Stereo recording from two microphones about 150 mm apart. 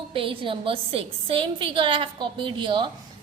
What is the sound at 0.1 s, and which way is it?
A woman's voice, 35° right (ahead or behind).